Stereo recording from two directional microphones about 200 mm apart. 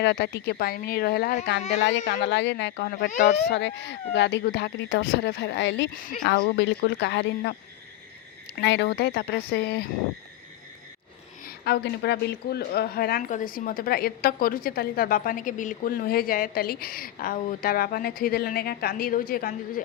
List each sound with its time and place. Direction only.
0.0 s speech: 55° left (ahead or behind)
2.2 s speech: 60° left (ahead or behind); by 3.3 s 40° left (ahead or behind)
3.4 s speech: 60° left (ahead or behind)
5.9 s speech: 45° left (ahead or behind)
6.2 s speech: 55° left (ahead or behind)
8.5 s speech: 60° left (ahead or behind)
11.4 s speech: 50° left (ahead or behind)